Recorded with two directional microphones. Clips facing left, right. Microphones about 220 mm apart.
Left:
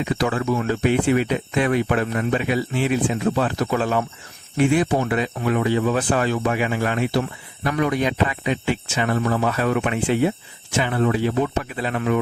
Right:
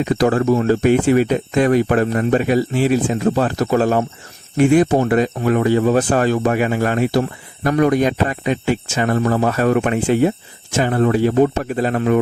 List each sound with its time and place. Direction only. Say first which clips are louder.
0.0 s speech: right 6 dB; 45° right (ahead or behind)